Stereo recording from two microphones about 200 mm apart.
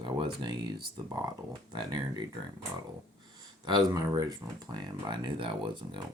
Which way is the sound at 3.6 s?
20° right (ahead or behind).